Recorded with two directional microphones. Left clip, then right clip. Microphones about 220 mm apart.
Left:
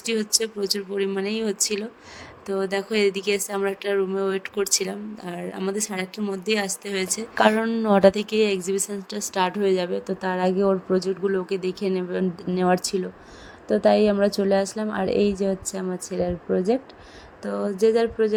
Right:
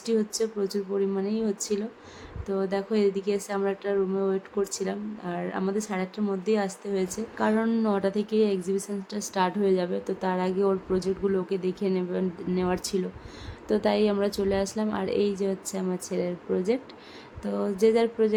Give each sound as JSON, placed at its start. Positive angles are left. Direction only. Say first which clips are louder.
{"t": 0.0, "sound": "speech", "louder": "left 2 dB", "side_deg": 40}
{"t": 7.6, "sound": "a woman's voice", "louder": "left 9 dB", "side_deg": 20}
{"t": 17.4, "sound": "a sound", "louder": "left 3 dB", "side_deg": 20}